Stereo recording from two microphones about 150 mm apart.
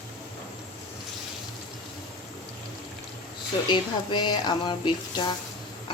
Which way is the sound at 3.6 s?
30° left (ahead or behind).